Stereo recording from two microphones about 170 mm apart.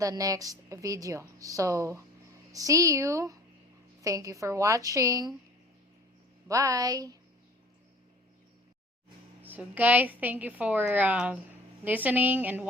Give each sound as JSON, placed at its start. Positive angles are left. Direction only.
{"t": 0.0, "sound": "a woman's voice", "side_deg": -20}
{"t": 6.5, "sound": "a woman's voice", "side_deg": -20}
{"t": 9.4, "sound": "a woman's voice", "side_deg": -10}